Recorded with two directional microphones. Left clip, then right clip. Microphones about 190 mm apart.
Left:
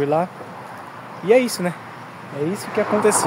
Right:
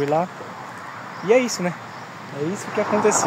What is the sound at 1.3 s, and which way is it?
Speech, 10° left (ahead or behind).